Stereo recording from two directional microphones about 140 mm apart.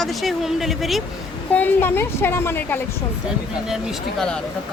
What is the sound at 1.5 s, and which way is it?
A woman's voice, 15° left (ahead or behind).